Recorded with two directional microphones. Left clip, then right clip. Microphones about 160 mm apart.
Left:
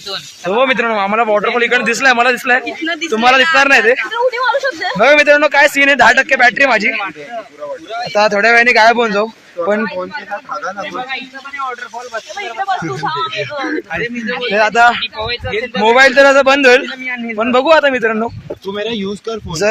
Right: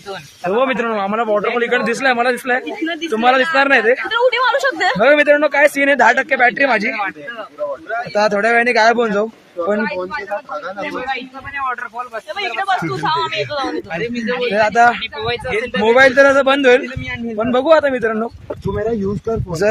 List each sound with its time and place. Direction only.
0.5 s speech: centre (ahead or behind)
2.6 s speech: 20° right (ahead or behind)
3.1 s speech: 5° left (ahead or behind)
4.1 s a woman's voice: 45° right (ahead or behind)
4.9 s speech: centre (ahead or behind)
8.1 s a man's voice: centre (ahead or behind)
12.1 s speech: 40° right (ahead or behind)
12.6 s speech: 20° right (ahead or behind)
14.5 s speech: centre (ahead or behind)
15.0 s speech: 90° right
15.4 s speech: 15° right (ahead or behind)
15.8 s a man's voice: 5° left (ahead or behind)
18.7 s speech: 30° left (ahead or behind)